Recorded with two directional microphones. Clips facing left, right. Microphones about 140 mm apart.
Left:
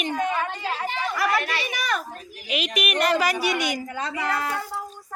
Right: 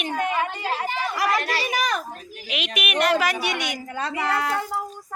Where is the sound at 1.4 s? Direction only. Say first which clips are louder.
Right 3 dB; 35° right (ahead or behind).